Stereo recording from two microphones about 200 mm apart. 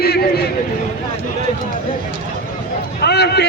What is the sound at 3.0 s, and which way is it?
Run, 55° left (ahead or behind).